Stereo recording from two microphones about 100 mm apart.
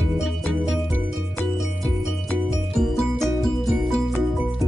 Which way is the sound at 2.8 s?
Centre (ahead or behind).